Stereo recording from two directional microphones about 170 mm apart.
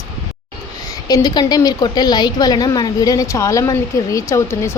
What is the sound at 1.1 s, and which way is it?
A woman's voice, 25° left (ahead or behind).